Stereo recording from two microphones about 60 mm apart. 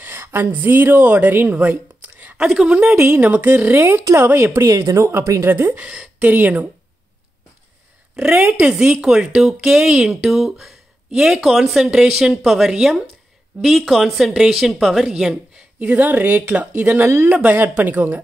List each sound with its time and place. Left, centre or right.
0.0 s a woman's voice: right
2.3 s speech: centre; by 3.7 s right
3.7 s speech: right
4.6 s speech: right
5.4 s speech: right
5.8 s speech: centre
8.2 s a woman's voice: centre
15.8 s speech: right
17.0 s speech: right
17.3 s speech: right